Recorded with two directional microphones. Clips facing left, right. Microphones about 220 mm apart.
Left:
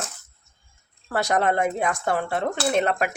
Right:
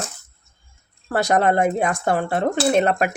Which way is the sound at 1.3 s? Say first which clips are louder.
Right 4 dB; 40° right (ahead or behind).